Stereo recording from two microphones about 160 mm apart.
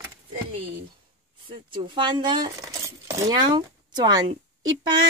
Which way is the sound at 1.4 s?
30° right (ahead or behind).